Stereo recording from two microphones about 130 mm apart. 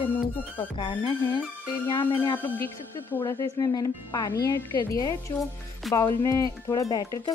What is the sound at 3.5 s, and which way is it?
Speech, 30° left (ahead or behind).